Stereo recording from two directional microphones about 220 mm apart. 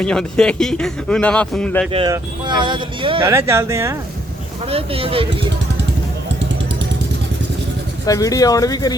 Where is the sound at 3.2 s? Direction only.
10° right (ahead or behind).